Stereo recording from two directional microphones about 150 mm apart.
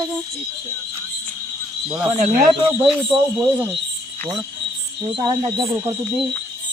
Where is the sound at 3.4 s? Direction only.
15° right (ahead or behind).